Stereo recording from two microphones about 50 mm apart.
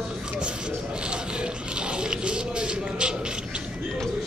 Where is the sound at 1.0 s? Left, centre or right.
Centre.